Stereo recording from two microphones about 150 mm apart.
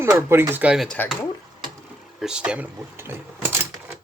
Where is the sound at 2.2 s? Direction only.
5° right (ahead or behind).